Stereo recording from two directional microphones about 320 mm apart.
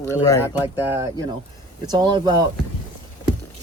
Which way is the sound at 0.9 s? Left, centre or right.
Centre.